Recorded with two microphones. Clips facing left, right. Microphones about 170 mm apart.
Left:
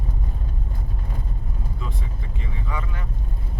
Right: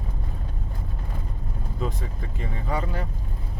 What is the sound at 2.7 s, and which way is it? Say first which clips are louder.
Speech: right 6 dB; 35° right (ahead or behind).